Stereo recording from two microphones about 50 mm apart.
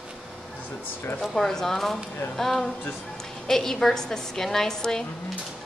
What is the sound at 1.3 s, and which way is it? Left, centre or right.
A woman's voice, centre.